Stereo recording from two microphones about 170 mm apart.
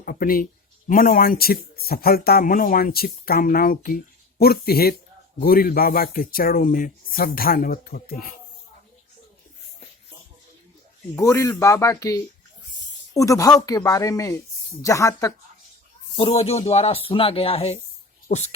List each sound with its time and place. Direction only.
0.0 s speech: 60° left (ahead or behind)
11.1 s speech: 15° left (ahead or behind)
16.1 s speech: 35° left (ahead or behind)